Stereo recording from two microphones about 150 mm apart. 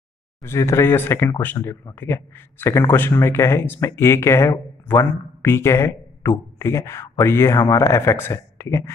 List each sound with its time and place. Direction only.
0.4 s speech: 20° left (ahead or behind)